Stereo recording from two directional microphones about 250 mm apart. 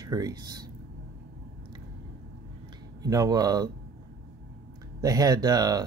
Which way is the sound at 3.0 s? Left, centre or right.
Centre.